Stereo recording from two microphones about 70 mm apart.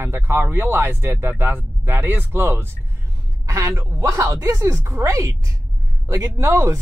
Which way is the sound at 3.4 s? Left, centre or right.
Right.